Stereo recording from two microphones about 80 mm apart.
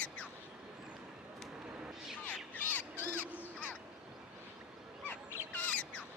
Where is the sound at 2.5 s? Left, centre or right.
Left.